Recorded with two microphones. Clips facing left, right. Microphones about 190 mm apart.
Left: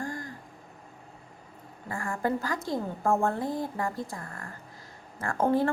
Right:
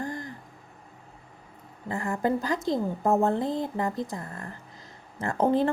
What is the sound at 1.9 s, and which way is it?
A woman's voice, 20° right (ahead or behind).